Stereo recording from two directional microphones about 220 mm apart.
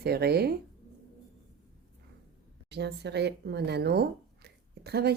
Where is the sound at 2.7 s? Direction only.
50° right (ahead or behind).